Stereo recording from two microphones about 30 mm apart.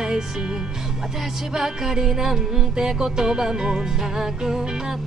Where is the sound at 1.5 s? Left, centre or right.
Centre.